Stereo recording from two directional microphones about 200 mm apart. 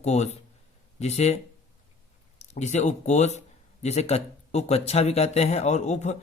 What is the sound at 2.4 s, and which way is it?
Speech, 35° left (ahead or behind).